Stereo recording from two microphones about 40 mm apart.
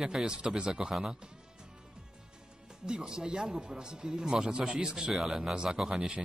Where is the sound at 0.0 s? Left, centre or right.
Centre.